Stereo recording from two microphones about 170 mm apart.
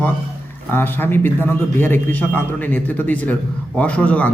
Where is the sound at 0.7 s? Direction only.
10° left (ahead or behind).